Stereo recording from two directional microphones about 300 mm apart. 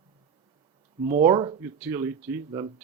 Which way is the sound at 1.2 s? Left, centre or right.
Centre.